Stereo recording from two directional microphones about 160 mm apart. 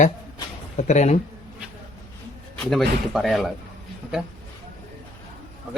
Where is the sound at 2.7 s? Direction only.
Centre (ahead or behind).